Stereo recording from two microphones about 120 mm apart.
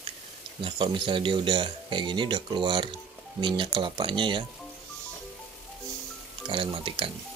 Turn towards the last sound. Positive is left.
turn(degrees=-45)  # may be behind; listen again after turning